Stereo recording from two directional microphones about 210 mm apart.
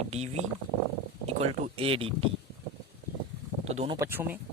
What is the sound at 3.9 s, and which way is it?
Speech, 10° right (ahead or behind).